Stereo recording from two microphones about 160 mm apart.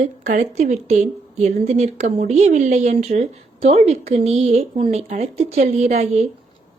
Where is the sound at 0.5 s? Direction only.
45° right (ahead or behind).